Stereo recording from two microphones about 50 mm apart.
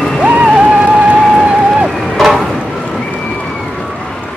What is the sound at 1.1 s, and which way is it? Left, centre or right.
Music, centre.